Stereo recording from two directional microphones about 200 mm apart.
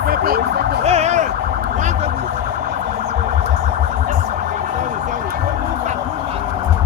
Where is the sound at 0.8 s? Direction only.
35° right (ahead or behind).